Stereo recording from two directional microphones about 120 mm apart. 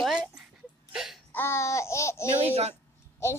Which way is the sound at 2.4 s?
65° right (ahead or behind).